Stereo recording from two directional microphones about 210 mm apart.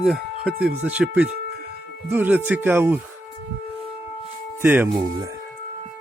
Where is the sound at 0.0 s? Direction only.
Centre (ahead or behind).